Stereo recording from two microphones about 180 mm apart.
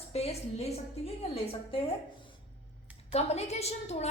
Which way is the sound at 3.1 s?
35° left (ahead or behind).